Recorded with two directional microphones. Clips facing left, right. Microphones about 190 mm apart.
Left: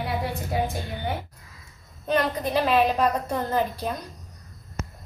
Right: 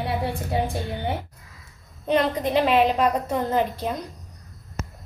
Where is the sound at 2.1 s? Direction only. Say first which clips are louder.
Right 3 dB; 20° right (ahead or behind).